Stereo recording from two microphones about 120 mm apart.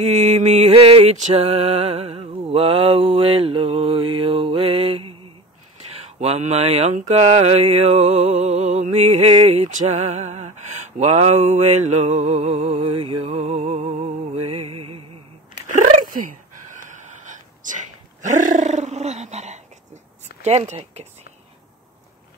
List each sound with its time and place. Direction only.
0.0 s music: 75° right (ahead or behind)
0.7 s a sound: 55° right (ahead or behind)
1.1 s mantra: 70° right (ahead or behind); by 5.3 s 50° right (ahead or behind)
5.9 s speech: 65° right (ahead or behind)
7.2 s music: 60° right (ahead or behind)
9.3 s a sound: 60° right (ahead or behind)
14.3 s music: 55° right (ahead or behind)
15.6 s a sound: 90° right
16.9 s roar: 90° right; by 20.0 s 75° right (ahead or behind)
20.4 s speech: 65° right (ahead or behind)